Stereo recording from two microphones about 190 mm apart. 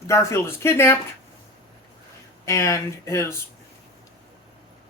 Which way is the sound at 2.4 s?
15° left (ahead or behind).